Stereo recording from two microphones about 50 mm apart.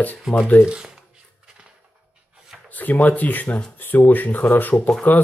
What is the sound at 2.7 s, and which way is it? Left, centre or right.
Speech, left.